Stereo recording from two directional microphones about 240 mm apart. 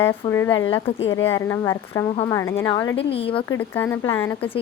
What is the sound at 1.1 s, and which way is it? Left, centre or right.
Speech, centre.